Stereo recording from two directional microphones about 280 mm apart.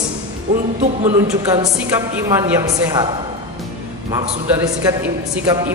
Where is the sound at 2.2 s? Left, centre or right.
Centre.